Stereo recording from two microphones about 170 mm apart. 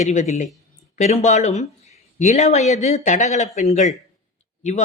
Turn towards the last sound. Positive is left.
turn(degrees=40)  # may be behind; listen again after turning